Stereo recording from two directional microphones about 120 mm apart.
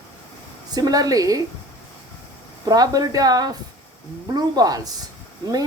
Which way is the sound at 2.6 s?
30° right (ahead or behind).